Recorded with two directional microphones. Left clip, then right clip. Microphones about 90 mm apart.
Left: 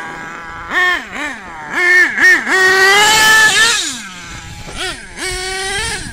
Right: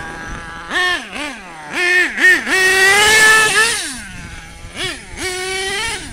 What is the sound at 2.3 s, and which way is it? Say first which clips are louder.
Vehicle: left 3 dB; 30° right (ahead or behind).